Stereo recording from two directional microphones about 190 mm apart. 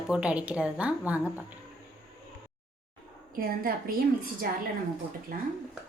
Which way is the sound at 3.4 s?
50° right (ahead or behind).